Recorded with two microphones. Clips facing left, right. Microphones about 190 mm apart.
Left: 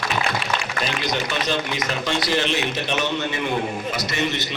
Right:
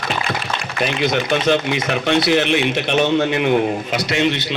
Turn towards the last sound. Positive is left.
turn(degrees=-75)  # may be behind; listen again after turning